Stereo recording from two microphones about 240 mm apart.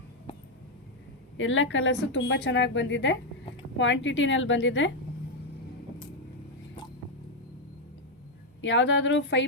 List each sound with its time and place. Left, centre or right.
1.4 s a woman's voice: left
8.6 s a woman's voice: left